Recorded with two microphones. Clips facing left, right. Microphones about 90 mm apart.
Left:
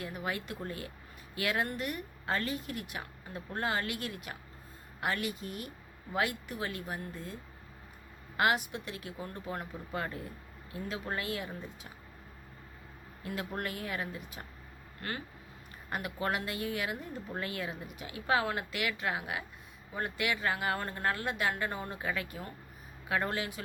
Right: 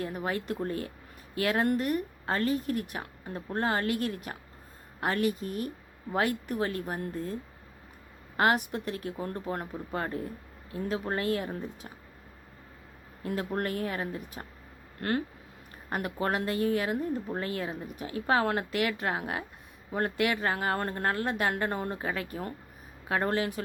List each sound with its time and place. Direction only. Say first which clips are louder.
0.0 s speech: right 5 dB; 40° right (ahead or behind)
8.4 s speech: right 4 dB; 45° right (ahead or behind)
13.2 s speech: right 6 dB; 35° right (ahead or behind)
15.9 s a woman's voice: right 4 dB; 45° right (ahead or behind)